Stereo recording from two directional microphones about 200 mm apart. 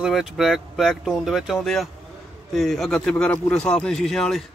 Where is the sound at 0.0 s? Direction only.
Centre (ahead or behind).